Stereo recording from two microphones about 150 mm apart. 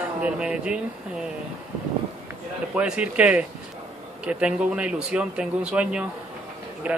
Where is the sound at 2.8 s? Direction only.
10° right (ahead or behind).